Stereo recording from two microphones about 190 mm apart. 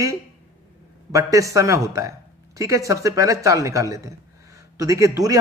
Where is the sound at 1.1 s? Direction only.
15° right (ahead or behind).